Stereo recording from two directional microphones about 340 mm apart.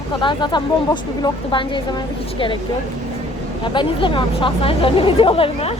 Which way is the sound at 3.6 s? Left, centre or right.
Centre.